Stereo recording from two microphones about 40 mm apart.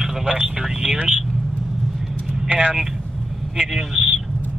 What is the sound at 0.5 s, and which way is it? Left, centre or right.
Speech, centre.